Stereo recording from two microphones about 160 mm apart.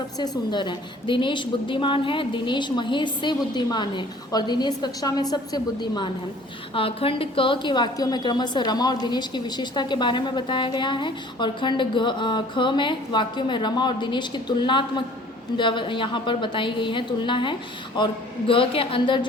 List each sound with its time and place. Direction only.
0.2 s a woman's voice: 30° left (ahead or behind)